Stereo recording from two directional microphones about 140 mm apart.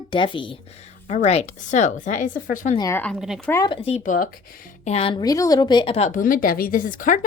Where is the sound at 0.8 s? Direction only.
50° left (ahead or behind); by 2.8 s 70° left (ahead or behind).